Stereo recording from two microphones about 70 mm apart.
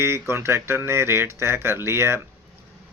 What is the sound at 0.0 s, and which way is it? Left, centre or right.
Speech, right.